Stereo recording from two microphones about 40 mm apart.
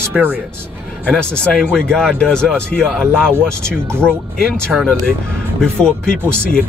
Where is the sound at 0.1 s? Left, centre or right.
Right.